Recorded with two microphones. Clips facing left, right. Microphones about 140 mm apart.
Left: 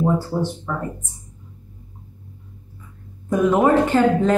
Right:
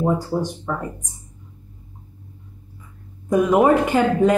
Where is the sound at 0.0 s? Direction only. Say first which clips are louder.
Even; 15° right (ahead or behind).